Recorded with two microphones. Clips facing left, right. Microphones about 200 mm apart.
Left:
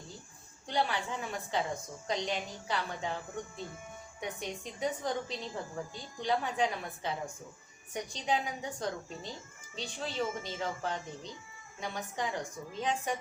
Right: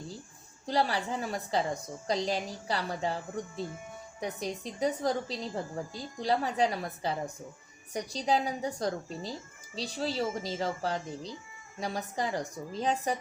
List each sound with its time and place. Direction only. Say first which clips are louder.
0.6 s a woman's voice: right 3 dB; 35° right (ahead or behind)